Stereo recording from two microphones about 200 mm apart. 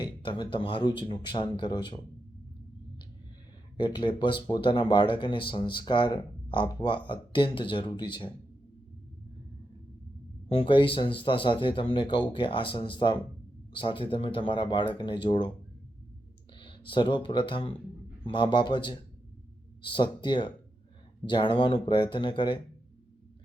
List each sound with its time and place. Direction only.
0.0 s speech: 25° left (ahead or behind)
3.8 s speech: 25° left (ahead or behind)
10.5 s speech: 25° left (ahead or behind)
16.6 s speech: 25° left (ahead or behind)